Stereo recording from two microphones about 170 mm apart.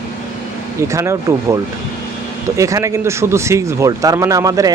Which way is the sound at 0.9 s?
15° right (ahead or behind).